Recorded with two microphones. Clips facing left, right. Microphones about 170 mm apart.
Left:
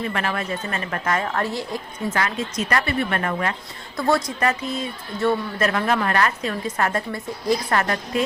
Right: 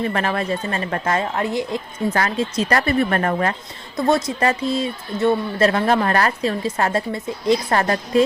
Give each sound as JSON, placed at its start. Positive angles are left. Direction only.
{"t": 0.0, "sound": "a woman's voice", "side_deg": -35}
{"t": 2.0, "sound": "a woman's voice", "side_deg": -35}
{"t": 3.9, "sound": "a woman's voice", "side_deg": -20}